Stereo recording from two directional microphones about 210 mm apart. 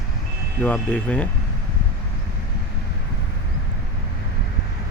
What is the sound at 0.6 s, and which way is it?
Speech, 5° left (ahead or behind).